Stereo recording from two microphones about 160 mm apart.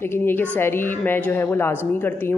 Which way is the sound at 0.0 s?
15° left (ahead or behind).